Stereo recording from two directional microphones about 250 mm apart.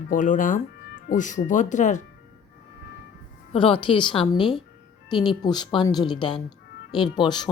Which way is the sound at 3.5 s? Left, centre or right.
Left.